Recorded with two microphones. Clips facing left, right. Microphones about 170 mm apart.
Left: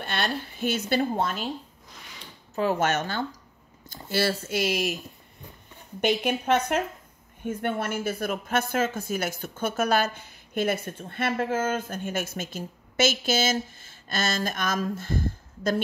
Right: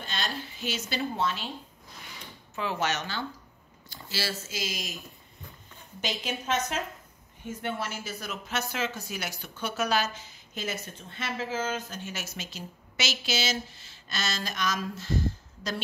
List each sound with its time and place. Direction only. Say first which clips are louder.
0.0 s speech: left 6 dB; 60° left (ahead or behind)
2.5 s a woman's voice: left 6 dB; 45° left (ahead or behind); by 4.9 s 65° left (ahead or behind)
5.9 s a woman's voice: left 9 dB; 60° left (ahead or behind)